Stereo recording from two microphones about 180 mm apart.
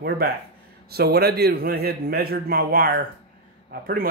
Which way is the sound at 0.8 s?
60° right (ahead or behind).